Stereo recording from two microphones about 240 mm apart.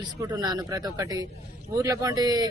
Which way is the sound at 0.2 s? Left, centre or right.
Centre.